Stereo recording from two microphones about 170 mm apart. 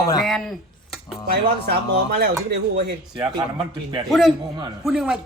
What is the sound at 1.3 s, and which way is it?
Speech, 70° right (ahead or behind).